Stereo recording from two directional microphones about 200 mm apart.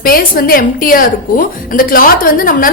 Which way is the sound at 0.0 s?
45° left (ahead or behind).